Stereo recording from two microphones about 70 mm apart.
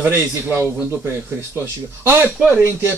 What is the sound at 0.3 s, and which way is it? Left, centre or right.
Speech, right.